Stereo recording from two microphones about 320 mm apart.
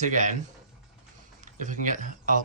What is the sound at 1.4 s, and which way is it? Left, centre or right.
Speech, right.